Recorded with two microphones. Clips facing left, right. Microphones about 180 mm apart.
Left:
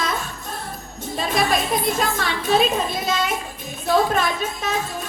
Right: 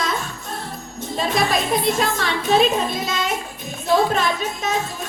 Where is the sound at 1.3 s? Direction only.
50° left (ahead or behind).